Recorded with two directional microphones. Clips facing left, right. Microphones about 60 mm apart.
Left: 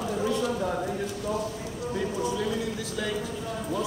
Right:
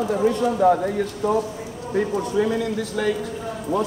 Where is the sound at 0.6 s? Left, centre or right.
Right.